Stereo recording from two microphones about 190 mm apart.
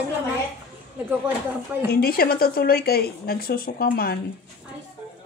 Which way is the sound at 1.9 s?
55° left (ahead or behind).